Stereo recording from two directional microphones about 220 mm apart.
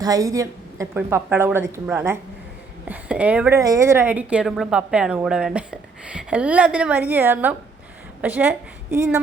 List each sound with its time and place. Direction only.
0.0 s a woman's voice: 15° right (ahead or behind)